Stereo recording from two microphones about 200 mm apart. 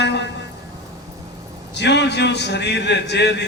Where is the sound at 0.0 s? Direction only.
60° left (ahead or behind).